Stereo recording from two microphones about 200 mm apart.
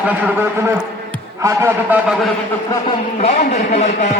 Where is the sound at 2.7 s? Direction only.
20° left (ahead or behind).